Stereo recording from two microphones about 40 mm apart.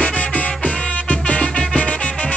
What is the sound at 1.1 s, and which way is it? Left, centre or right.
Music, left.